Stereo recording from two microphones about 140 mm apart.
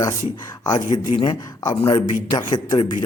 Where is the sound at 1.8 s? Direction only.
40° left (ahead or behind).